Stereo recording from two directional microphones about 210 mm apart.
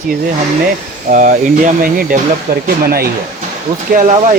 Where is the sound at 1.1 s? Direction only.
40° right (ahead or behind).